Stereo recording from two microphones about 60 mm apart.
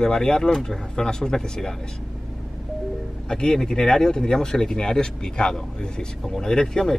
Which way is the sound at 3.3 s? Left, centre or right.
Centre.